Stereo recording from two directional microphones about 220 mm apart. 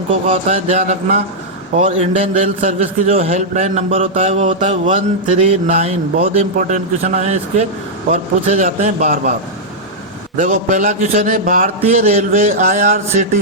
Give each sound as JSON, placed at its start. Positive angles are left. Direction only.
{"t": 0.3, "sound": "a man's voice", "side_deg": -30}
{"t": 10.3, "sound": "a man's voice", "side_deg": -35}